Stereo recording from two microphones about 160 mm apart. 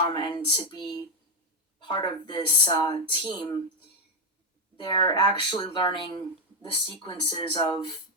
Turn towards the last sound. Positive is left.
turn(degrees=30)  # may be behind; listen again after turning